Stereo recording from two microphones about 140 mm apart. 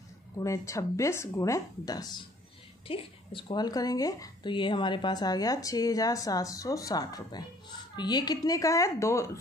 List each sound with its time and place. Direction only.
0.4 s speech: 20° left (ahead or behind)
2.9 s speech: 40° left (ahead or behind); by 9.4 s 20° left (ahead or behind)